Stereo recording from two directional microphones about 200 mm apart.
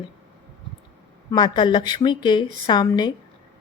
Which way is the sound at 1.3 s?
20° left (ahead or behind).